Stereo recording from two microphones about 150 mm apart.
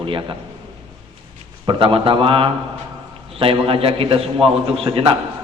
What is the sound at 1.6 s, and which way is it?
A man's voice, 35° right (ahead or behind).